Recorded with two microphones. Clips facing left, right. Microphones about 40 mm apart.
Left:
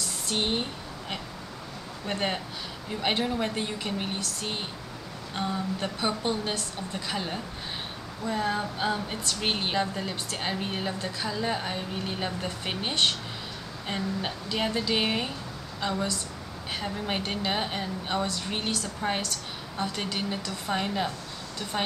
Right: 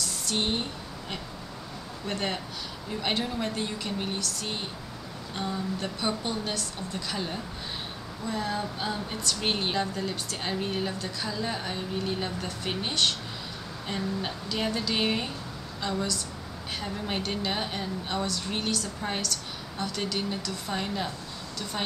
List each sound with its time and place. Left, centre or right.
0.3 s a woman's voice: centre
2.0 s a woman's voice: centre